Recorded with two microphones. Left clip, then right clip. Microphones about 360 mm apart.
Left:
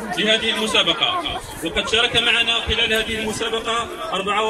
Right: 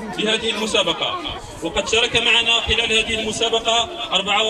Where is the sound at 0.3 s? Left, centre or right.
Centre.